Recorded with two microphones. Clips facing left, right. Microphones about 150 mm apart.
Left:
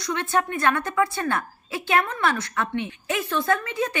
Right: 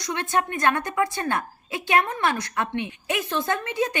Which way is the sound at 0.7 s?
20° right (ahead or behind).